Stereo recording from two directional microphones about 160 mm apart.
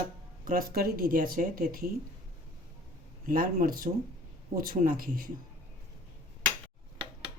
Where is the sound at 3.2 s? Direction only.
60° right (ahead or behind).